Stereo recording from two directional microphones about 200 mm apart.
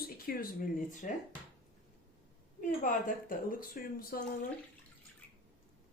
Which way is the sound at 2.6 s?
40° left (ahead or behind).